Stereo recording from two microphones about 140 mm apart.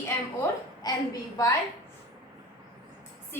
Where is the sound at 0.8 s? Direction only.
30° left (ahead or behind).